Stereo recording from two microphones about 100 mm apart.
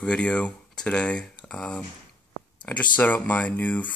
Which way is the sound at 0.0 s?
10° left (ahead or behind).